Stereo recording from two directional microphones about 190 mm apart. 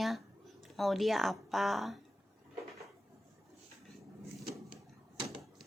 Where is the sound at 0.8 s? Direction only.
Centre (ahead or behind).